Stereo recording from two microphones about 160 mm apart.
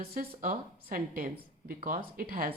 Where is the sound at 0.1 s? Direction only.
65° right (ahead or behind).